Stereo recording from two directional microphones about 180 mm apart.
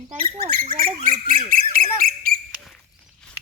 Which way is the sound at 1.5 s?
50° right (ahead or behind).